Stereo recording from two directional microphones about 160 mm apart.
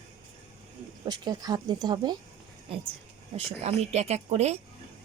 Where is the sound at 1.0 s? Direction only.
25° right (ahead or behind).